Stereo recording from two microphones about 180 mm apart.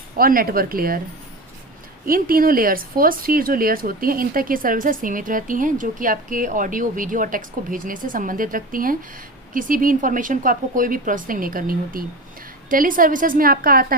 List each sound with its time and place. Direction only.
0.2 s speech: 55° right (ahead or behind)
2.0 s speech: 55° right (ahead or behind)